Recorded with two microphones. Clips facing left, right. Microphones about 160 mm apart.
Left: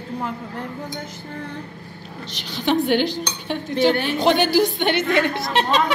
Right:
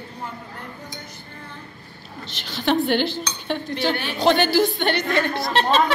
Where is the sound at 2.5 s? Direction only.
10° left (ahead or behind).